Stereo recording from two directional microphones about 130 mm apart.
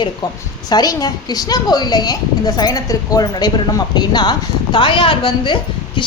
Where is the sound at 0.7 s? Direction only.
30° left (ahead or behind).